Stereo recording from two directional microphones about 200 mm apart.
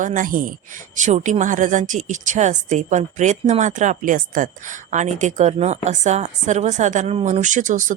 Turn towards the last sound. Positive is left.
turn(degrees=-40)  # may be behind; listen again after turning